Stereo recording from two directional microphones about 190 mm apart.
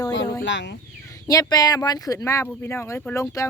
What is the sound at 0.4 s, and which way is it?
Speech, 70° left (ahead or behind).